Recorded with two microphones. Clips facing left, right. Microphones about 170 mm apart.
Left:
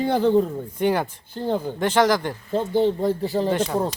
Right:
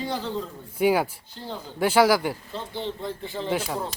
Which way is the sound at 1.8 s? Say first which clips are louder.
Right 1 dB; 10° right (ahead or behind).